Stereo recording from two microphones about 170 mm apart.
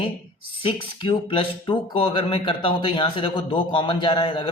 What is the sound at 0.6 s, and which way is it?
Speech, 30° left (ahead or behind).